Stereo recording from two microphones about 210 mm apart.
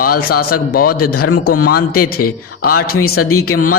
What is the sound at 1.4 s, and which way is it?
A man's voice, 45° left (ahead or behind).